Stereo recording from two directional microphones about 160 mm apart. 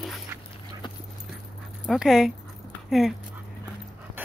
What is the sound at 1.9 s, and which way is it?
Speech, 5° right (ahead or behind).